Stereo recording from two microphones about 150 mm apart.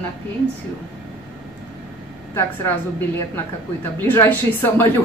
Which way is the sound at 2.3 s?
15° left (ahead or behind).